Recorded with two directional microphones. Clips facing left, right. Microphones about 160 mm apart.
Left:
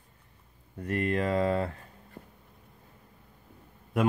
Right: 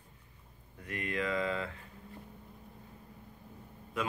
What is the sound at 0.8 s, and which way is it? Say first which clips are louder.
Speech: left 8 dB; 45° left (ahead or behind).